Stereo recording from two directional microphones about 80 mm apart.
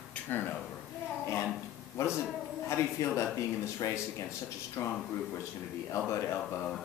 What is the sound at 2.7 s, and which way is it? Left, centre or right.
A man's voice, left.